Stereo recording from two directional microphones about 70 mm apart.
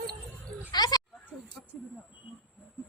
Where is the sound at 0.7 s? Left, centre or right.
Left.